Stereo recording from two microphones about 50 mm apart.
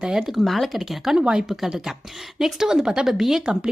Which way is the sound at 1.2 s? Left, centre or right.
Centre.